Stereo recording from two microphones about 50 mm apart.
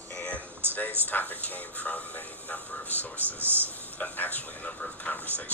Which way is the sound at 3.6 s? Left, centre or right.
Left.